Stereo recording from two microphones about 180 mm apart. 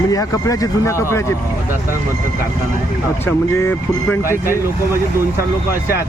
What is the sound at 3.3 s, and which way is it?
Speech, 10° left (ahead or behind).